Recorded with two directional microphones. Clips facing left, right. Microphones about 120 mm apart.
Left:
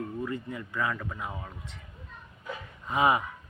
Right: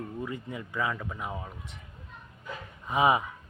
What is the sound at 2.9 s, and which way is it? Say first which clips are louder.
Speech: right 1 dB; 20° right (ahead or behind).